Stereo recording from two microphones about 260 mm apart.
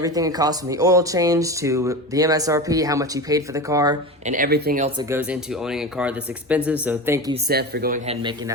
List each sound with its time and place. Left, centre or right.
0.0 s speech: centre
4.3 s speech: right
5.1 s speech: centre
7.4 s speech: right